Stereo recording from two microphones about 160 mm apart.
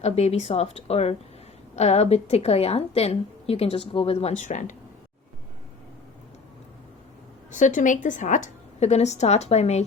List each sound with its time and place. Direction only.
0.0 s a woman's voice: 45° left (ahead or behind)
7.5 s a woman's voice: 50° left (ahead or behind)